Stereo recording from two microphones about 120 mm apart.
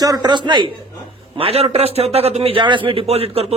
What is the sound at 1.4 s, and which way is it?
A man's voice, 55° right (ahead or behind).